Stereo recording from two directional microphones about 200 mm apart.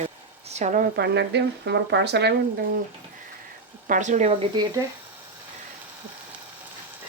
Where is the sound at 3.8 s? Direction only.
40° right (ahead or behind).